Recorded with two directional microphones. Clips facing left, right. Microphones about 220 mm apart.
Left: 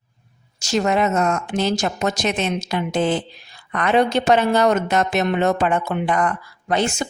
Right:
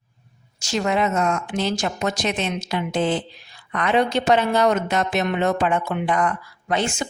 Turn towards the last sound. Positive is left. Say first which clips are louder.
# left 3 dB
turn(degrees=40)  # may be behind; listen again after turning